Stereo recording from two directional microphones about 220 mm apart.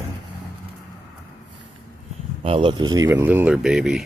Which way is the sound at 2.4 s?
25° right (ahead or behind).